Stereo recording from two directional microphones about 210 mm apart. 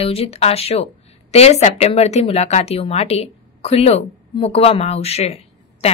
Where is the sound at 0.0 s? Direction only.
30° left (ahead or behind).